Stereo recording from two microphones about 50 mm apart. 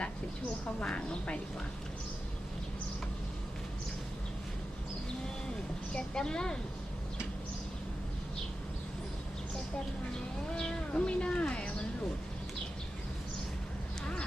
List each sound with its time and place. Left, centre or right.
0.8 s a woman's voice: left
5.9 s speech: centre
10.5 s a sound: centre